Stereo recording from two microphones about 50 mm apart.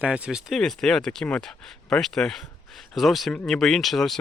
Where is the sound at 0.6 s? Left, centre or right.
Centre.